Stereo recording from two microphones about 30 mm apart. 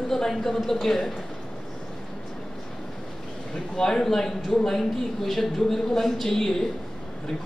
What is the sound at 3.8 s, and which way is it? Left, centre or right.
A man's voice, centre.